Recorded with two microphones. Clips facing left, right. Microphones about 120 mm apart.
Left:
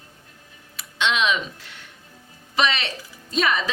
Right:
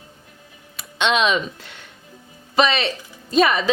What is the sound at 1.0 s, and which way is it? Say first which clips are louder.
Speech: right 4 dB; 40° right (ahead or behind).